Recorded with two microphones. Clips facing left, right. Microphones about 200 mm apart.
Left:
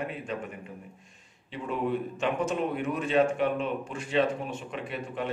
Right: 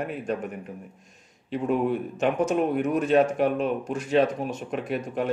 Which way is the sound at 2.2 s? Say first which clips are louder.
Right 7 dB; 45° right (ahead or behind).